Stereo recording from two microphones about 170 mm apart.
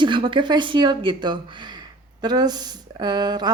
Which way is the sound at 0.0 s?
30° right (ahead or behind).